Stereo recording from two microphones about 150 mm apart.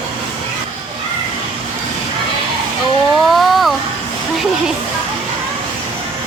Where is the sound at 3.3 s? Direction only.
Centre (ahead or behind).